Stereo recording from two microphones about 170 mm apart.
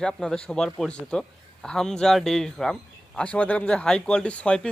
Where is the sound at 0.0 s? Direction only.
5° left (ahead or behind).